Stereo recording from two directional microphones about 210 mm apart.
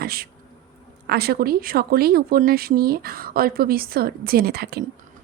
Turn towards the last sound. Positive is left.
turn(degrees=-50)  # may be behind; listen again after turning